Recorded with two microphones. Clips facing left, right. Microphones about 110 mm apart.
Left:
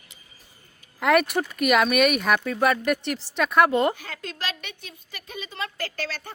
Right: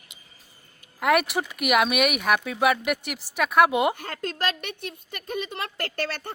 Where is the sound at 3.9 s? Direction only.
55° right (ahead or behind).